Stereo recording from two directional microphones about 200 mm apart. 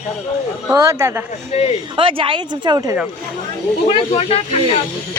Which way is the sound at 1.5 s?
30° left (ahead or behind).